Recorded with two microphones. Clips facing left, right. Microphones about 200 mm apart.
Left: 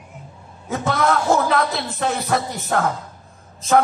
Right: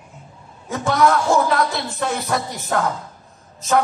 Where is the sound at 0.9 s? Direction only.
50° left (ahead or behind).